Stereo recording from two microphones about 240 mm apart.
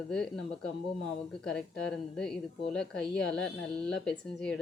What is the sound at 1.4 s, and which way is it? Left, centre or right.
A woman's voice, centre.